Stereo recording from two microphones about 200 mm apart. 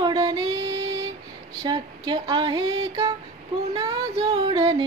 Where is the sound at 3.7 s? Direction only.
15° right (ahead or behind).